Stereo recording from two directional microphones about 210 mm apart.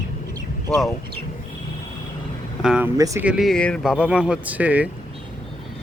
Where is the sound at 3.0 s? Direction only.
15° right (ahead or behind).